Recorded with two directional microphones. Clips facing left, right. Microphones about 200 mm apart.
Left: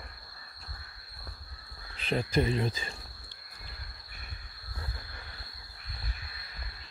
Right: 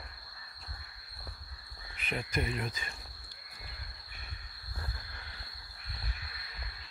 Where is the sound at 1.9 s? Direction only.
30° left (ahead or behind).